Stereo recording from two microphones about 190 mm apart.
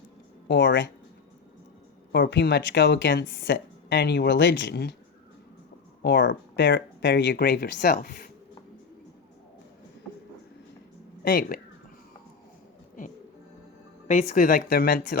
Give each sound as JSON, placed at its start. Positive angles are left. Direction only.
{"t": 0.4, "sound": "speech", "side_deg": 60}
{"t": 2.1, "sound": "speech", "side_deg": 60}
{"t": 6.0, "sound": "speech", "side_deg": 60}
{"t": 11.2, "sound": "speech", "side_deg": 50}
{"t": 14.1, "sound": "speech", "side_deg": 45}